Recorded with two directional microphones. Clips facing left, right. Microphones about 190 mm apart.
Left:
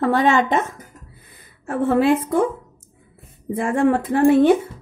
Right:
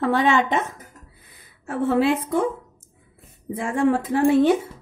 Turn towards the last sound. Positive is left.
turn(degrees=55)  # may be behind; listen again after turning